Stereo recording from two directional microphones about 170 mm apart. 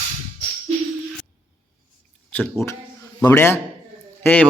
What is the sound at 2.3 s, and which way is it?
Speech, 15° left (ahead or behind).